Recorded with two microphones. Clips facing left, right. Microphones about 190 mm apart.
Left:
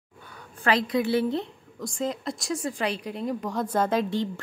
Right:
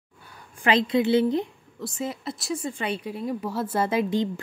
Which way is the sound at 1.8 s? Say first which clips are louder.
Left 1 dB; 5° right (ahead or behind).